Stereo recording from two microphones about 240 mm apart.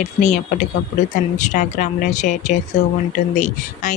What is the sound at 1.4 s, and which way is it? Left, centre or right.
Speech, left.